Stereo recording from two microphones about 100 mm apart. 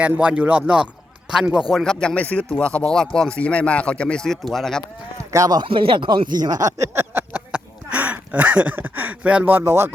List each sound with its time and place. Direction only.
0.0 s speech: 10° right (ahead or behind)
1.7 s speech: 5° left (ahead or behind)
5.3 s speech: 40° right (ahead or behind)
5.6 s speech: 60° right (ahead or behind); by 9.9 s 25° right (ahead or behind)